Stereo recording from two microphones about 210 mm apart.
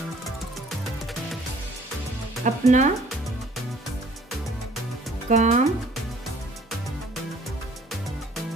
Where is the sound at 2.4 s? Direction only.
35° right (ahead or behind).